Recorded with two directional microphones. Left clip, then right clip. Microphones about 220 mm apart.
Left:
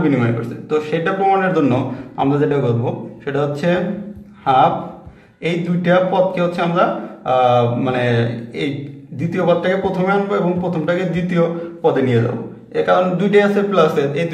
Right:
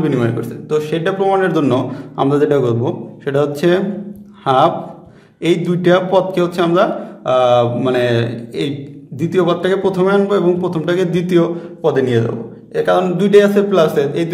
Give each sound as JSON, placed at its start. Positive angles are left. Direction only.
{"t": 0.0, "sound": "a man's voice", "side_deg": -55}
{"t": 5.4, "sound": "a man's voice", "side_deg": -55}